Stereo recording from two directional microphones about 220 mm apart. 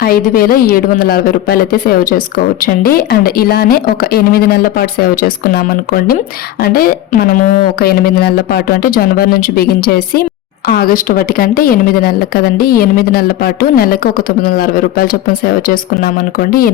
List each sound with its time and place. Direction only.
0.0 s a woman's voice: 40° left (ahead or behind)